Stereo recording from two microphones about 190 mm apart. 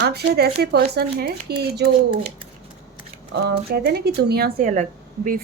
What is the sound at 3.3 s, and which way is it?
Speech, 65° right (ahead or behind).